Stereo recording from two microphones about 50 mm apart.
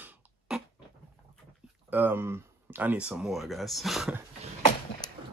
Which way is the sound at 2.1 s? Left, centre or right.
Right.